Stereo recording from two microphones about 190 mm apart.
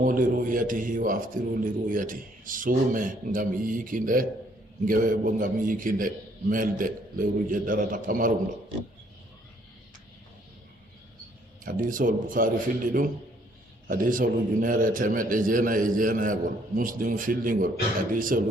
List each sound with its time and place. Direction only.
0.0 s a man's voice: 45° right (ahead or behind)
11.6 s a man's voice: 45° right (ahead or behind)